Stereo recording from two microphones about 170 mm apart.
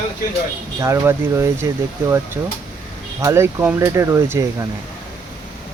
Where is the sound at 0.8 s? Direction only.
15° right (ahead or behind).